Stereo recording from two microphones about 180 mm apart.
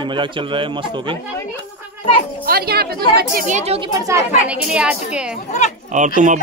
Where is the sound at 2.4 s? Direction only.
60° right (ahead or behind).